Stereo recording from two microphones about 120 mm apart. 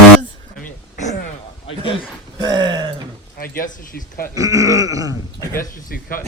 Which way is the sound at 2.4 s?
35° right (ahead or behind).